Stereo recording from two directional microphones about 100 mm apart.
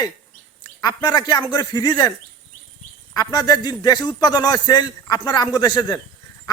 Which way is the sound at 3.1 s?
45° left (ahead or behind).